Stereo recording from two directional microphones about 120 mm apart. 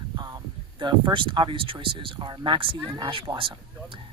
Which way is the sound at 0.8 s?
40° right (ahead or behind).